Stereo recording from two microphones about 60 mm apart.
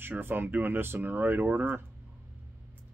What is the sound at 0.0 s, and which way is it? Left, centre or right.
Speech, right.